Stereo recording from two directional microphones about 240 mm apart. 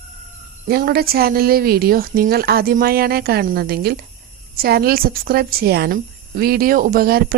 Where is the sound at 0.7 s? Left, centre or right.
Right.